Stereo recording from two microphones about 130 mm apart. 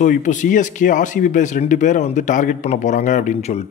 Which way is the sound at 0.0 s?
75° left (ahead or behind).